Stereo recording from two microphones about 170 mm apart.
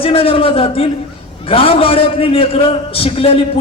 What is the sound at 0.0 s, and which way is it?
A man's voice, 35° left (ahead or behind).